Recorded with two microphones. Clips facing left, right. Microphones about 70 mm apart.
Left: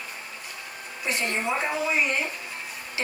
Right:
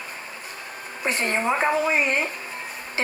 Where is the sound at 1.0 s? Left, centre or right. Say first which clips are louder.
Right 4 dB; right.